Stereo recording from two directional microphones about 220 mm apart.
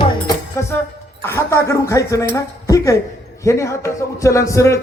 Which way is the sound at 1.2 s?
10° left (ahead or behind).